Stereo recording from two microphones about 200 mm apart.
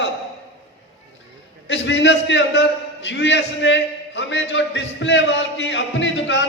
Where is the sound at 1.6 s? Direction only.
60° left (ahead or behind).